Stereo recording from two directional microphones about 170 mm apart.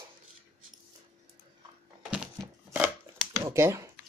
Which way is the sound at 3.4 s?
15° right (ahead or behind).